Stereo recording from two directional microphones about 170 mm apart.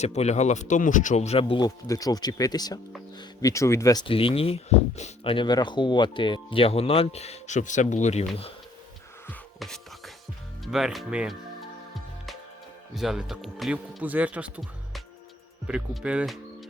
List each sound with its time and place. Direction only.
0.0 s speech: 40° left (ahead or behind)
1.6 s speech: 20° left (ahead or behind)
4.0 s speech: 30° left (ahead or behind)
9.6 s music: centre (ahead or behind)
10.6 s speech: centre (ahead or behind)
12.9 s speech: 5° right (ahead or behind)